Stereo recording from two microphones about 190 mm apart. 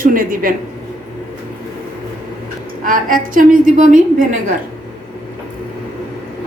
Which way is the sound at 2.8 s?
45° right (ahead or behind).